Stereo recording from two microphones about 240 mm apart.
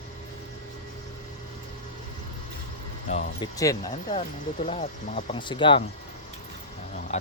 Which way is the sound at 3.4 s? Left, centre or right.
Centre.